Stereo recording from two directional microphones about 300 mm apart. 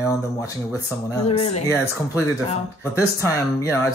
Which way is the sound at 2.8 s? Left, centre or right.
Centre.